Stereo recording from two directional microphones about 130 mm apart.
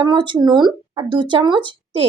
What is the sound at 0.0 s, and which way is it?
A woman's voice, 35° right (ahead or behind).